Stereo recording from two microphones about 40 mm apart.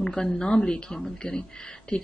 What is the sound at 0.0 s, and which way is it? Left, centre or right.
Speech, centre.